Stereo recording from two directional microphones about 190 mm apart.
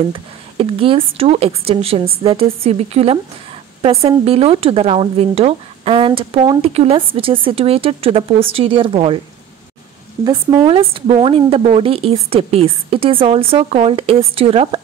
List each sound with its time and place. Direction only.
0.1 s a woman's voice: 30° right (ahead or behind)
10.2 s speech: 20° right (ahead or behind)